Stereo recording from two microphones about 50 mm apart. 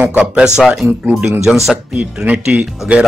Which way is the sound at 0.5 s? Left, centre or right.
Centre.